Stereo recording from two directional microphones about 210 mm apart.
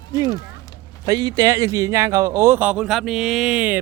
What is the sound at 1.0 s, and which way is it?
Speech, 20° right (ahead or behind).